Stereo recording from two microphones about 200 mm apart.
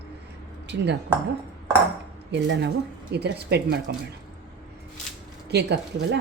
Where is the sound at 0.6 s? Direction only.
60° right (ahead or behind).